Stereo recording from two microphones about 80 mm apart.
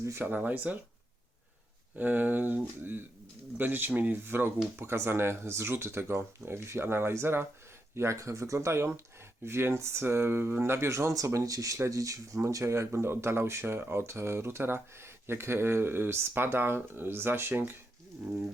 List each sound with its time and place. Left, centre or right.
0.0 s speech: right
0.3 s speech: right
2.0 s speech: right